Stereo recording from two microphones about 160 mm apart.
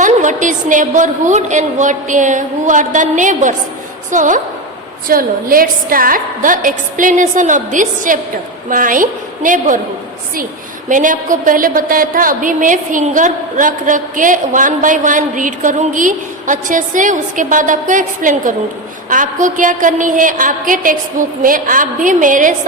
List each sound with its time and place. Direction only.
0.0 s a woman's voice: 50° right (ahead or behind)
5.0 s a woman's voice: 60° right (ahead or behind)
10.8 s a woman's voice: 55° right (ahead or behind)